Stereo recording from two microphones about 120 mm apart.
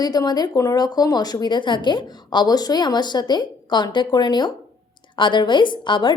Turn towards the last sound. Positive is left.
turn(degrees=40)  # may be behind; listen again after turning